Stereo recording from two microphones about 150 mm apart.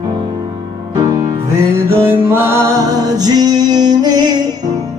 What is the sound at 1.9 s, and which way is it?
Music, 15° right (ahead or behind).